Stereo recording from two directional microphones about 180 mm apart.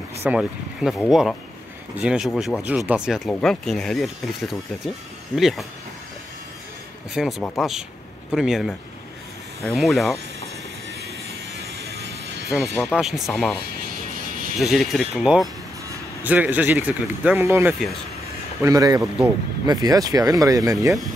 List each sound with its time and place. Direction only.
0.2 s speech: 5° right (ahead or behind)
3.3 s speech: 5° left (ahead or behind)
7.2 s speech: centre (ahead or behind)
9.8 s speech: centre (ahead or behind)
11.5 s vehicle: 70° right (ahead or behind)
12.4 s speech: centre (ahead or behind)
14.6 s speech: centre (ahead or behind); by 20.9 s 20° right (ahead or behind)